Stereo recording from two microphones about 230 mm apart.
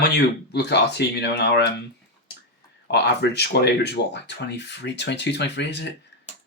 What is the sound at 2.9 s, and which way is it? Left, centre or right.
Speech, left.